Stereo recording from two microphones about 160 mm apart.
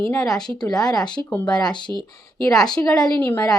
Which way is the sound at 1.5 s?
25° left (ahead or behind).